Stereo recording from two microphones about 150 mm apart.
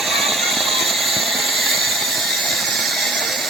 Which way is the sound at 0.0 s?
Centre (ahead or behind).